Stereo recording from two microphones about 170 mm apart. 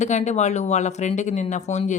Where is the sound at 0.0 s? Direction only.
45° left (ahead or behind).